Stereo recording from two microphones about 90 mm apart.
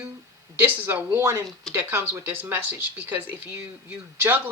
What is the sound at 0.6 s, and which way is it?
Speech, 20° right (ahead or behind).